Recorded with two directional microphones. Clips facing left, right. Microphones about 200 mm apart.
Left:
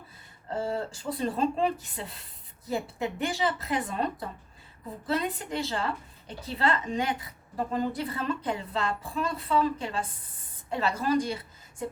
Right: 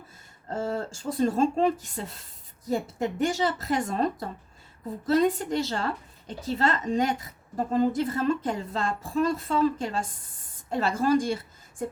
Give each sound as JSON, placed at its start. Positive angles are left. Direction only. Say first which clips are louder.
{"t": 0.5, "sound": "a woman's voice", "louder": "right 1 dB", "side_deg": -45}